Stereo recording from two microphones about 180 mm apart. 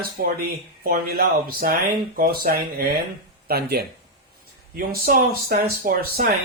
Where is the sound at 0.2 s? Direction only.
55° right (ahead or behind).